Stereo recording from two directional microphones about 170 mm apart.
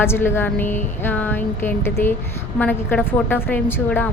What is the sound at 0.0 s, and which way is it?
A woman's voice, 15° left (ahead or behind).